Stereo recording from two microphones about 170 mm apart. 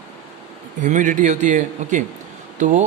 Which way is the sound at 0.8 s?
45° right (ahead or behind).